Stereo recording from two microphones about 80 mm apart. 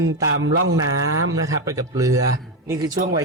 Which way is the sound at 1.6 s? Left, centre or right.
Right.